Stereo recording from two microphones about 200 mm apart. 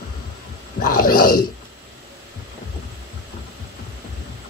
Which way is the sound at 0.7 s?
45° left (ahead or behind).